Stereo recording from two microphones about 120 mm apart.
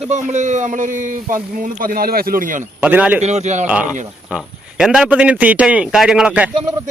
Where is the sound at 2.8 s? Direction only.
10° right (ahead or behind).